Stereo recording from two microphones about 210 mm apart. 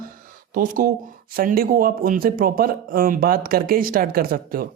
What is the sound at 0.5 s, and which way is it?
Speech, 40° right (ahead or behind).